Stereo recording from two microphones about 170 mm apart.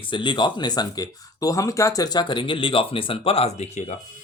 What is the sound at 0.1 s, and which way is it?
Speech, 30° left (ahead or behind).